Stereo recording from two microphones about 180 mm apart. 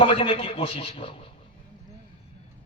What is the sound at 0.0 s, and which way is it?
A man's voice, 30° left (ahead or behind).